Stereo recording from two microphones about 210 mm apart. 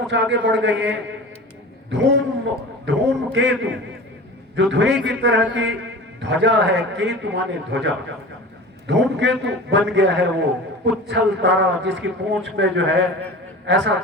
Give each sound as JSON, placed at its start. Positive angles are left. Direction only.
{"t": 0.1, "sound": "a man's voice", "side_deg": -55}